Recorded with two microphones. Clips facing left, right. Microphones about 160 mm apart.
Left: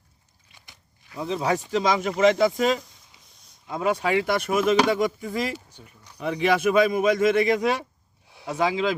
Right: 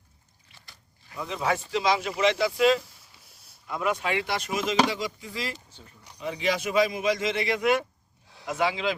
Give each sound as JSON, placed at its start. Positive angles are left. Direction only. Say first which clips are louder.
{"t": 0.5, "sound": "speech", "louder": "left 1 dB", "side_deg": 20}
{"t": 3.2, "sound": "a sound", "louder": "even", "side_deg": -5}
{"t": 3.7, "sound": "speech", "louder": "left 3 dB", "side_deg": 30}
{"t": 4.3, "sound": "speech", "louder": "left 7 dB", "side_deg": 55}
{"t": 5.5, "sound": "speech", "louder": "left 5 dB", "side_deg": 15}
{"t": 6.1, "sound": "speech", "louder": "left 6 dB", "side_deg": 60}